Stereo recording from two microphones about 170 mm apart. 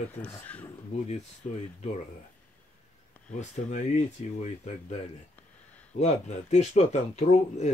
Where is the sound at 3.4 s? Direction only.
40° left (ahead or behind).